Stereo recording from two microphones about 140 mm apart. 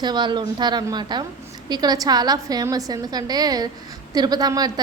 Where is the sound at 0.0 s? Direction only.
35° right (ahead or behind).